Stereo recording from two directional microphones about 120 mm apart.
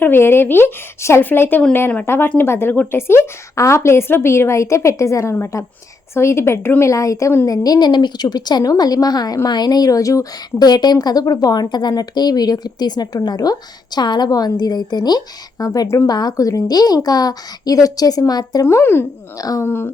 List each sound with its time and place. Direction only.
0.0 s a woman's voice: 20° left (ahead or behind)
18.6 s a woman's voice: 20° left (ahead or behind)
19.4 s a woman's voice: 30° left (ahead or behind)
19.6 s speech: 20° left (ahead or behind)